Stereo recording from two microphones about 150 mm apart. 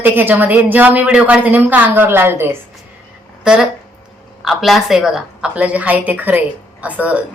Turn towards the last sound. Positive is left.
turn(degrees=-10)  # may be behind; listen again after turning